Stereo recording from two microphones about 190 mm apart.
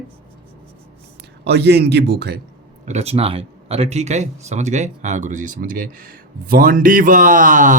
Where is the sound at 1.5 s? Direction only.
60° right (ahead or behind).